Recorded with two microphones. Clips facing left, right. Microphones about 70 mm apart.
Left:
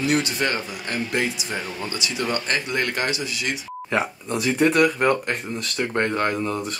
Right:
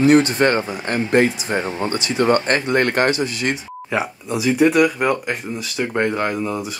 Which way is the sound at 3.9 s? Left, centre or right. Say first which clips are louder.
Right 2 dB; centre.